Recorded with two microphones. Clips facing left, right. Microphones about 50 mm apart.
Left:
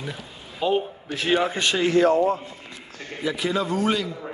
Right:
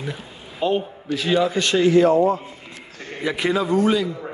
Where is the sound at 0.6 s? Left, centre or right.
Centre.